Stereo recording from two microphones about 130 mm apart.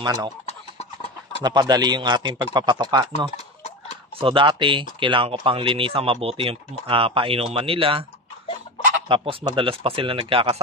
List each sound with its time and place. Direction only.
0.0 s speech: 30° right (ahead or behind)
0.5 s chicken: 50° left (ahead or behind)
1.4 s speech: 30° right (ahead or behind)
9.1 s speech: 40° right (ahead or behind)